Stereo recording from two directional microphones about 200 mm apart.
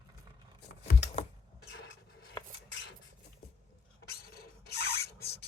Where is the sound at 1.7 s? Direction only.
55° left (ahead or behind).